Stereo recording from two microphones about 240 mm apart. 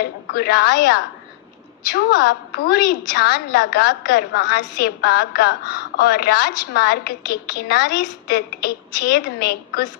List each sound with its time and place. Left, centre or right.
0.0 s a woman's voice: left